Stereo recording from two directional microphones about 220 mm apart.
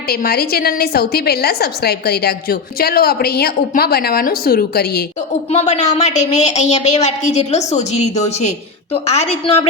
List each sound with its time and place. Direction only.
0.1 s a woman's voice: 45° left (ahead or behind)
5.5 s a woman's voice: 30° left (ahead or behind)